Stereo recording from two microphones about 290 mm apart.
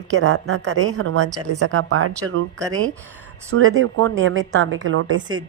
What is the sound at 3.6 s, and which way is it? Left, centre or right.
A woman's voice, right.